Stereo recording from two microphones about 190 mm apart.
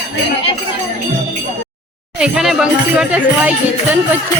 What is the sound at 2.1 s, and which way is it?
Speech, 5° right (ahead or behind).